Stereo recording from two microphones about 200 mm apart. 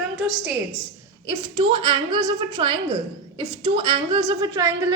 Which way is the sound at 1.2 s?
25° right (ahead or behind).